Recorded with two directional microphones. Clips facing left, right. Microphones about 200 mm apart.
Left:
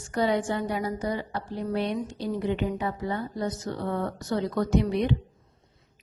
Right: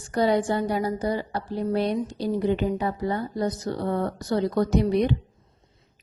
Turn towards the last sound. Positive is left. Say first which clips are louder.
# right 3 dB
turn(degrees=-40)  # may be behind; listen again after turning